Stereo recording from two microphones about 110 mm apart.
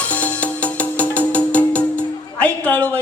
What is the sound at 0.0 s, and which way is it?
Music, 15° left (ahead or behind).